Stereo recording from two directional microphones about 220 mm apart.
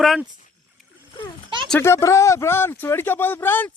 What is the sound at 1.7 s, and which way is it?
Speech, 10° left (ahead or behind).